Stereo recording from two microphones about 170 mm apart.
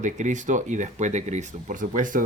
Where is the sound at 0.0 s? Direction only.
45° right (ahead or behind).